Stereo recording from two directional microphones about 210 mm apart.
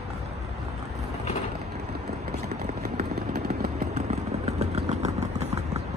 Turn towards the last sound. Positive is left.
turn(degrees=-30)  # may be behind; listen again after turning